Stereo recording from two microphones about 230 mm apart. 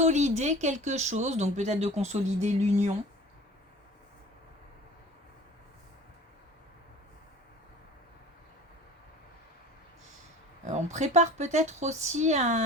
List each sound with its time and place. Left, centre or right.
0.0 s speech: right
10.7 s speech: right